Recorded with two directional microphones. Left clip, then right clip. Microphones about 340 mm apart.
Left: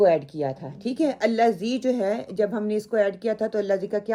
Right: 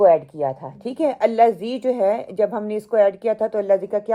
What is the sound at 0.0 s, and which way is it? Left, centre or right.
A woman's voice, centre.